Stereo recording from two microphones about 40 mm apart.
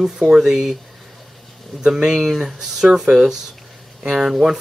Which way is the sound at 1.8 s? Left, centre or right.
Centre.